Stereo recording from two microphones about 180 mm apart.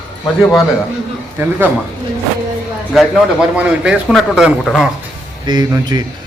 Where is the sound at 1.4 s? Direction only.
10° right (ahead or behind).